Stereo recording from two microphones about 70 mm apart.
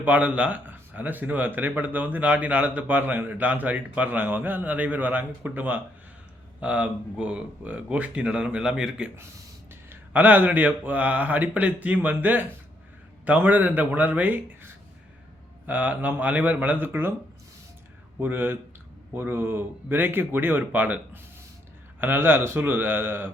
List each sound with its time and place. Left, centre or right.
0.0 s speech: right
9.9 s speech: right
18.2 s speech: right